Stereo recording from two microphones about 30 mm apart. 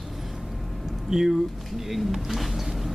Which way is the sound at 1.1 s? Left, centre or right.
Centre.